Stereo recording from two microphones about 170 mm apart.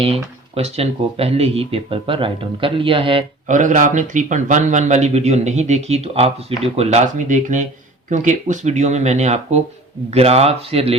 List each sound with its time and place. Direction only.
0.0 s speech: 35° right (ahead or behind)
3.4 s a man's voice: 45° right (ahead or behind)